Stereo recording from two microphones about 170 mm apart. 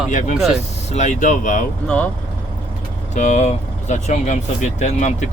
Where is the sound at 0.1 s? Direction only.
45° left (ahead or behind).